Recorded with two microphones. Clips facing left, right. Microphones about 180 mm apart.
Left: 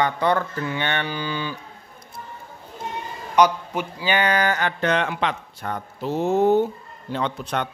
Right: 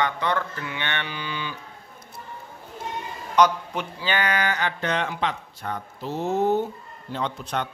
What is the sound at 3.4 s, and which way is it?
Speech, 10° left (ahead or behind).